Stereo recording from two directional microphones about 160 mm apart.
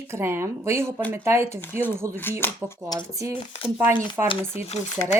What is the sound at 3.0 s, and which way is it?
A woman's voice, 20° right (ahead or behind).